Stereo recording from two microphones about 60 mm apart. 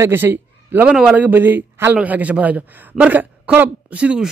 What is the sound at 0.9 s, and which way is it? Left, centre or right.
Speech, centre.